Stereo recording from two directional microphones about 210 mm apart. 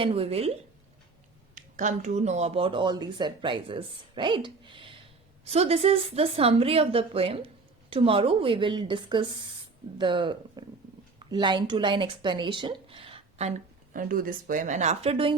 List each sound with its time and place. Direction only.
0.0 s a woman's voice: 25° right (ahead or behind)
1.5 s a woman's voice: 35° right (ahead or behind)
13.9 s speech: 40° right (ahead or behind); by 15.4 s 25° right (ahead or behind)